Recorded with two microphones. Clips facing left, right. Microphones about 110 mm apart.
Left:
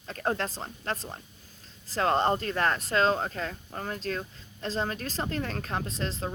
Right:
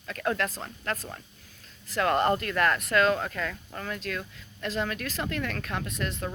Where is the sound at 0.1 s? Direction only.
35° left (ahead or behind).